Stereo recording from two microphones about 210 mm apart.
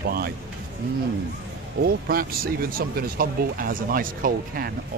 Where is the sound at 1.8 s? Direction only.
45° right (ahead or behind).